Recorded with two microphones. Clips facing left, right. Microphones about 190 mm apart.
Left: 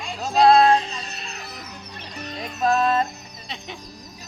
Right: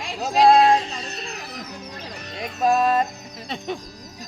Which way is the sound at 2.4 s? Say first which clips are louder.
Right 1 dB; 10° right (ahead or behind).